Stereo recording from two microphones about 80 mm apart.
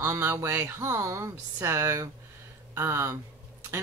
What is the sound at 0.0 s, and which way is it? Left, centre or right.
Speech, right.